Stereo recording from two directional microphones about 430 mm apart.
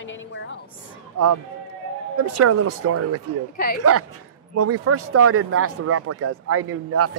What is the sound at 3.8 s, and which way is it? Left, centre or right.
Speech, right.